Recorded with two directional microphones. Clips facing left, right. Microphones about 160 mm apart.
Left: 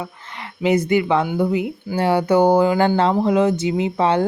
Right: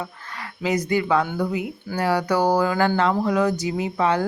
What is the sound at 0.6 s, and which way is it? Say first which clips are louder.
A woman's voice: left 5 dB; 25° left (ahead or behind).